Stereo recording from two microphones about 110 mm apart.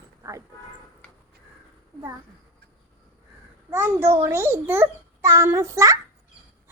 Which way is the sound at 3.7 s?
20° right (ahead or behind).